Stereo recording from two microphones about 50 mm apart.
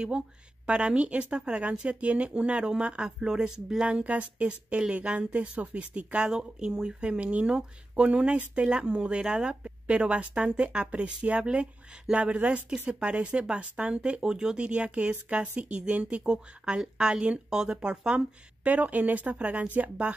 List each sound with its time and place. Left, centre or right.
0.7 s speech: right
3.8 s speech: right